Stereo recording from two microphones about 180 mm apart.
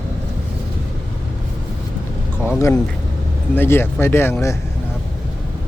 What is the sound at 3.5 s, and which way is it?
Speech, 15° left (ahead or behind).